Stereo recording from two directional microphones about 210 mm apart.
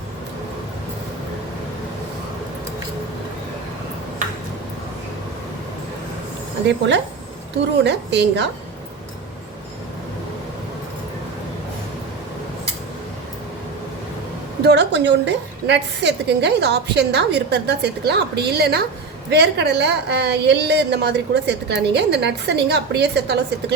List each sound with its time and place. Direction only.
6.7 s a woman's voice: 55° right (ahead or behind)
14.6 s a woman's voice: 55° right (ahead or behind)